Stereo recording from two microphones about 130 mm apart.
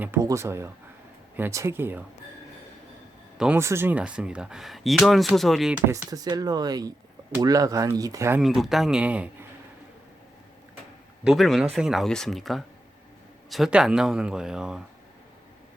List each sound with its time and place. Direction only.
0.0 s speech: 20° right (ahead or behind)
3.3 s speech: 5° right (ahead or behind)
3.6 s speech: 20° right (ahead or behind); by 5.7 s centre (ahead or behind)
6.1 s speech: 30° right (ahead or behind)
8.4 s speech: centre (ahead or behind)
11.2 s speech: centre (ahead or behind)